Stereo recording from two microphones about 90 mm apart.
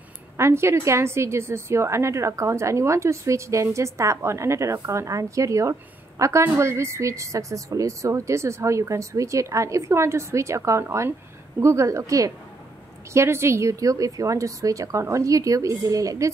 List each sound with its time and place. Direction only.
0.4 s a woman's voice: 30° right (ahead or behind)